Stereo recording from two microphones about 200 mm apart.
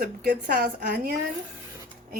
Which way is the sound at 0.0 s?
50° right (ahead or behind).